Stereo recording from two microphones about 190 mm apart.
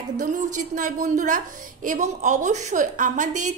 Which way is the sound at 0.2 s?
45° right (ahead or behind).